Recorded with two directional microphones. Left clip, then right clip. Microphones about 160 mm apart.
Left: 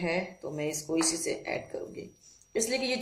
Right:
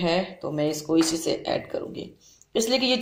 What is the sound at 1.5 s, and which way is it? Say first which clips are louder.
Speech: right 7 dB; 40° right (ahead or behind).